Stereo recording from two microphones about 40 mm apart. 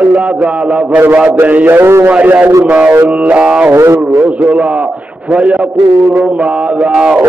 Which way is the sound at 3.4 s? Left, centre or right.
Right.